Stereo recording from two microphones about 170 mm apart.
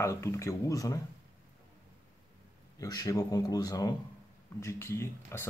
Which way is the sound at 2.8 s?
20° left (ahead or behind).